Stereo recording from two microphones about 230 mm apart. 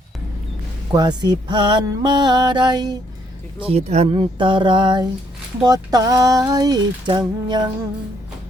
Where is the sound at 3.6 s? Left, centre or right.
Right.